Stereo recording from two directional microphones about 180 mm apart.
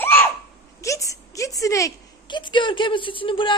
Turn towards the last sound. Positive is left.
turn(degrees=30)  # may be behind; listen again after turning